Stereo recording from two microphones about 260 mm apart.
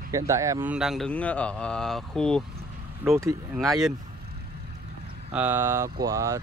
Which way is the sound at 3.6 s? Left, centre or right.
Centre.